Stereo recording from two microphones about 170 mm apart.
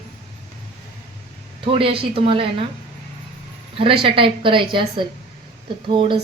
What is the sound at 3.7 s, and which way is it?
A woman's voice, 30° right (ahead or behind).